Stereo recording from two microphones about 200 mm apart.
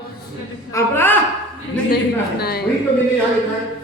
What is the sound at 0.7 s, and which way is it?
Speech, 10° left (ahead or behind).